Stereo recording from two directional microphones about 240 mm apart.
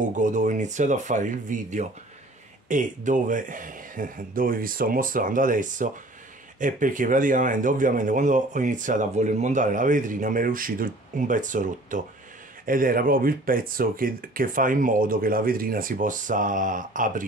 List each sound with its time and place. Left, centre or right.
0.0 s speech: right